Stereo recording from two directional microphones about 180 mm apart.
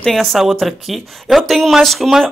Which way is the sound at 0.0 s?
Centre (ahead or behind).